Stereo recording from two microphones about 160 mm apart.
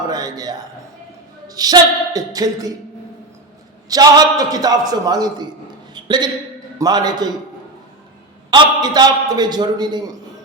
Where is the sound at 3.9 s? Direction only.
25° right (ahead or behind).